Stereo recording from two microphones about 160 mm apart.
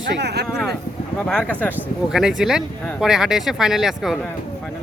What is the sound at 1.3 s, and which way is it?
Speech, 5° left (ahead or behind).